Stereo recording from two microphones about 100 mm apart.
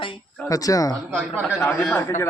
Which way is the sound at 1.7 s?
Centre (ahead or behind).